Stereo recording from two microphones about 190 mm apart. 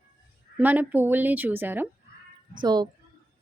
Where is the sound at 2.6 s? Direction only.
20° right (ahead or behind).